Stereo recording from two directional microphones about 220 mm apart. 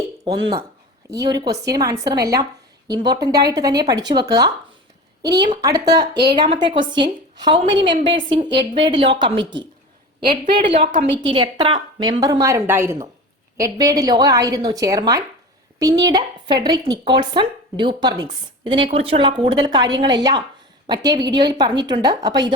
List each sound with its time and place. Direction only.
1.1 s a woman's voice: 15° right (ahead or behind)